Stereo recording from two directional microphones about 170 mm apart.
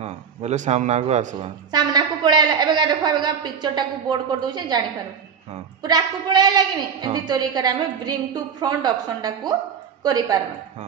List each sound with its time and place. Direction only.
0.0 s speech: 40° right (ahead or behind)
1.7 s a man's voice: 25° right (ahead or behind)